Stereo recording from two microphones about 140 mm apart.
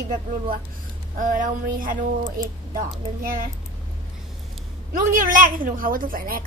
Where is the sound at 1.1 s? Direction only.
70° right (ahead or behind).